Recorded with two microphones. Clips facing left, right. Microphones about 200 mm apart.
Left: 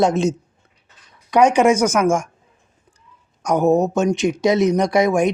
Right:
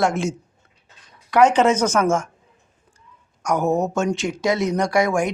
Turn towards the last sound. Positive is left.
turn(degrees=20)  # may be behind; listen again after turning